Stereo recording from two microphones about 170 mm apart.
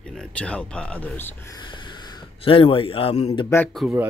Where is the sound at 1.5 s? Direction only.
30° left (ahead or behind).